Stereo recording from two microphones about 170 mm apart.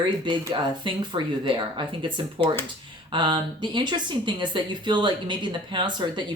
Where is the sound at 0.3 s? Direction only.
25° right (ahead or behind).